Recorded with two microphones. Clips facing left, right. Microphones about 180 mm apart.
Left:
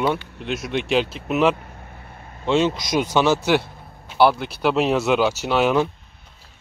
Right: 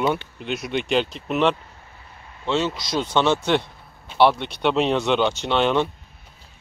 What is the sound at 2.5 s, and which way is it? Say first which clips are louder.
Speech: left 4 dB; 20° left (ahead or behind).